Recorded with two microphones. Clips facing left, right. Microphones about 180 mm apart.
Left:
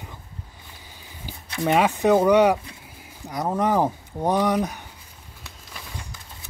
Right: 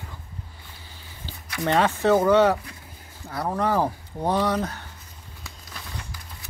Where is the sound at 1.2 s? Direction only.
15° left (ahead or behind).